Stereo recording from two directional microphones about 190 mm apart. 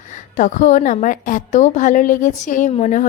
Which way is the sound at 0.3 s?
40° left (ahead or behind).